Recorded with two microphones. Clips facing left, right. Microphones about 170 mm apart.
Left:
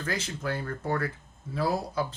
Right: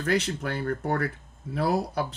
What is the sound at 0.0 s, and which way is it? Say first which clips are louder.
Speech: right 6 dB; 70° right (ahead or behind).